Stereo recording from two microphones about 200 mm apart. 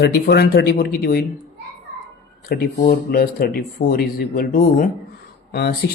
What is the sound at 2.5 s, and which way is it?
Speech, 45° left (ahead or behind).